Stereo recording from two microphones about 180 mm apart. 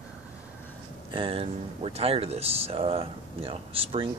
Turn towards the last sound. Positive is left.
turn(degrees=-30)  # may be behind; listen again after turning